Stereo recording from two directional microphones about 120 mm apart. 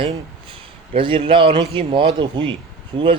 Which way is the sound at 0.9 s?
45° right (ahead or behind).